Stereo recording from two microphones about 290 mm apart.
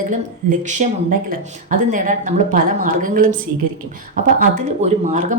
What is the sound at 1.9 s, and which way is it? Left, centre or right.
A woman's voice, right.